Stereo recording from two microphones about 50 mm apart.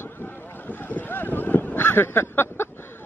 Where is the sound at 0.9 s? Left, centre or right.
Left.